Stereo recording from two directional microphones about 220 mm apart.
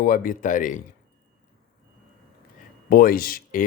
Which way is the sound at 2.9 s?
40° left (ahead or behind).